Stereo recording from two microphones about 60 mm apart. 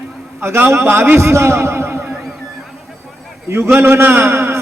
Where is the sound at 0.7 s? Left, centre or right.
Right.